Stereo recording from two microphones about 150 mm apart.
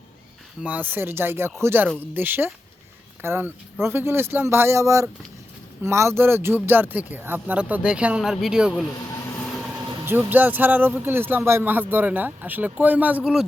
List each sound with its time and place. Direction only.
0.6 s a man's voice: 10° right (ahead or behind)
9.5 s vehicle: centre (ahead or behind)
10.1 s a man's voice: 15° right (ahead or behind)